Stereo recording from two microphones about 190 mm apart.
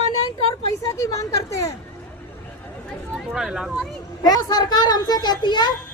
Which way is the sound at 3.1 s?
Centre (ahead or behind).